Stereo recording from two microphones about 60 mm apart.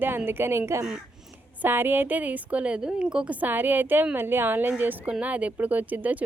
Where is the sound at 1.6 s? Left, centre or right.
Right; by 3.2 s centre.